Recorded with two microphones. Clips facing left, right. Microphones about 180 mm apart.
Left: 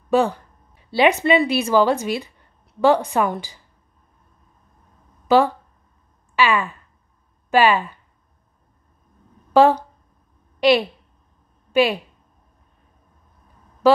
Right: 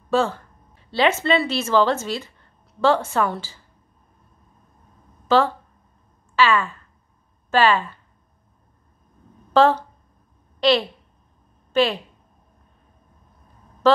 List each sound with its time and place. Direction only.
0.1 s speech: 15° left (ahead or behind)
5.3 s speech: 15° left (ahead or behind)
9.5 s a woman's voice: 15° left (ahead or behind)
13.8 s a sound: 10° left (ahead or behind)